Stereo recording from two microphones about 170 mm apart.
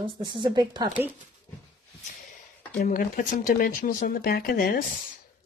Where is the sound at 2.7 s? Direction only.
50° left (ahead or behind).